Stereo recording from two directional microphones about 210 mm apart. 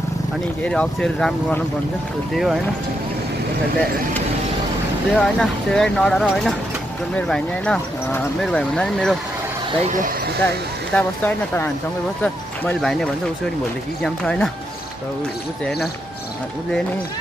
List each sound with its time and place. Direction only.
0.7 s speech: 5° left (ahead or behind)
5.1 s speech: centre (ahead or behind)
9.8 s speech: 40° right (ahead or behind)
10.4 s speech: 5° left (ahead or behind)